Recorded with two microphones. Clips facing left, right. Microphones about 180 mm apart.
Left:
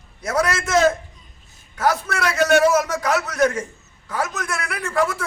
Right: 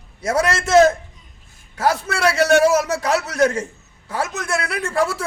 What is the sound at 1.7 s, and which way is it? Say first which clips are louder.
A man's voice: right 1 dB; 30° right (ahead or behind).